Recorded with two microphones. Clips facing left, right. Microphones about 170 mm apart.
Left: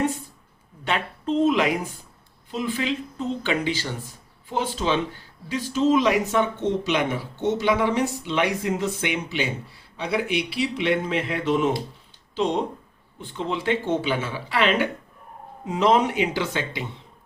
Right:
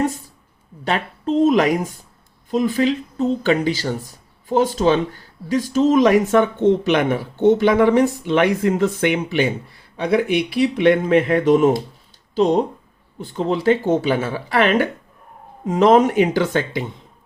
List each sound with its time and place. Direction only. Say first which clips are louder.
0.9 s speech: right 4 dB; 40° right (ahead or behind)